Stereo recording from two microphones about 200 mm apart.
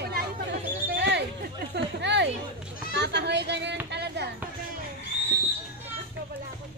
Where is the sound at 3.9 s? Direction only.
55° right (ahead or behind).